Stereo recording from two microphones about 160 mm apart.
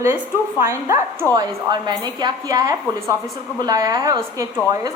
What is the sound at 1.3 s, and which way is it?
A woman's voice, 25° right (ahead or behind).